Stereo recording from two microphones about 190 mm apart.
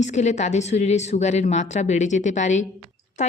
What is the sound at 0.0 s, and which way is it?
A woman's voice, 40° left (ahead or behind).